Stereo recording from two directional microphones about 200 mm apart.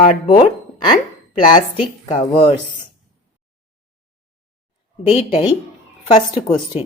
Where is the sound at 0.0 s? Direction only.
35° left (ahead or behind).